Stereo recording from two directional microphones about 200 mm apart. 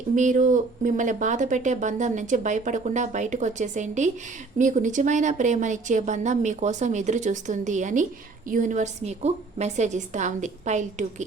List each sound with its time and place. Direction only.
0.2 s speech: 40° right (ahead or behind)